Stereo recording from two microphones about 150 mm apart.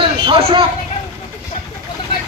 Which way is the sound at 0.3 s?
40° right (ahead or behind).